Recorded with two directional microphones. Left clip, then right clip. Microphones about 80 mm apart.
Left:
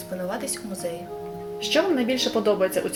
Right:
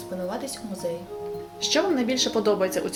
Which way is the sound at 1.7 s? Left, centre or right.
Left.